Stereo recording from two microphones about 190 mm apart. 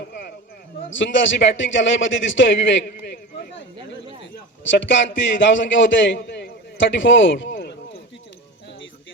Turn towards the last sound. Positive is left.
turn(degrees=70)  # may be behind; listen again after turning